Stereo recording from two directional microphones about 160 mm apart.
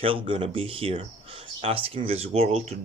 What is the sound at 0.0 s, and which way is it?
Speech, 30° right (ahead or behind).